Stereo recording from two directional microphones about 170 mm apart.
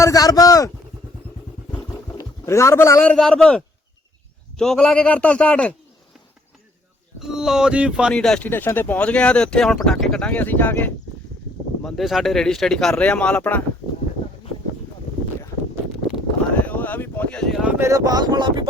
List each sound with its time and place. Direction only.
0.0 s speech: 20° left (ahead or behind)
2.1 s speech: 15° left (ahead or behind)
3.1 s a man's voice: 5° left (ahead or behind)
7.2 s a man's voice: 5° right (ahead or behind)
16.6 s speech: 10° left (ahead or behind); by 18.7 s 25° right (ahead or behind)